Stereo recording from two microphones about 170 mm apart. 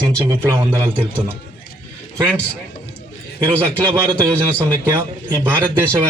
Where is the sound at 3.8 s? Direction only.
20° right (ahead or behind).